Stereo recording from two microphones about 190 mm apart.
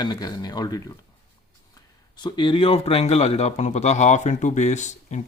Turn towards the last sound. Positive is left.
turn(degrees=40)  # may be behind; listen again after turning